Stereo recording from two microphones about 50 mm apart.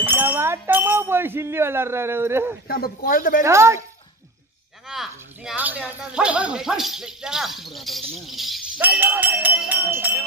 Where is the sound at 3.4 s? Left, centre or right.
Right.